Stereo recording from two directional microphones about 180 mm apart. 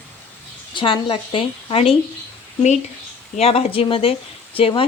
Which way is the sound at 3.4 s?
35° left (ahead or behind).